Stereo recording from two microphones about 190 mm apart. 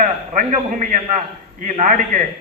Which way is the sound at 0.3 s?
45° right (ahead or behind).